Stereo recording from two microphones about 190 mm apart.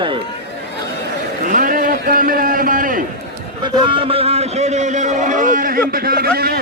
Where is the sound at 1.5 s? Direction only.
45° right (ahead or behind).